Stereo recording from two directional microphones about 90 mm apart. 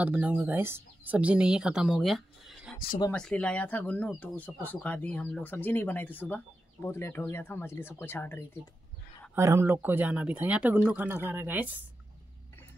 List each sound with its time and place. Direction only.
0.0 s speech: 20° right (ahead or behind)
1.1 s speech: 15° right (ahead or behind)
3.2 s speech: 10° left (ahead or behind)
9.4 s speech: 30° right (ahead or behind)